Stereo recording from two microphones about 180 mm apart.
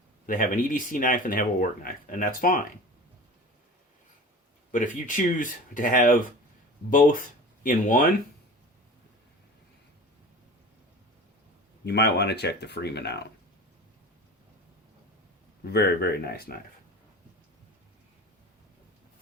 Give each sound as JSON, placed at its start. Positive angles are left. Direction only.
{"t": 0.3, "sound": "speech", "side_deg": 45}
{"t": 4.7, "sound": "speech", "side_deg": 45}
{"t": 11.9, "sound": "speech", "side_deg": 65}
{"t": 15.6, "sound": "speech", "side_deg": 60}